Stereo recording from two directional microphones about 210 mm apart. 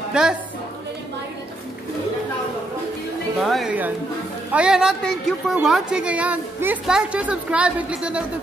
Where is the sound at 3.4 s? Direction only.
Centre (ahead or behind).